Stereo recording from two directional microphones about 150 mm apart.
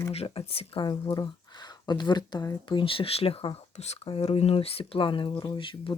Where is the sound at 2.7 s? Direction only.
35° left (ahead or behind).